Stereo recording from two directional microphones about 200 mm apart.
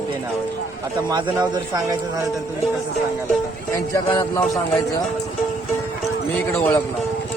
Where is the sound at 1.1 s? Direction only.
20° right (ahead or behind).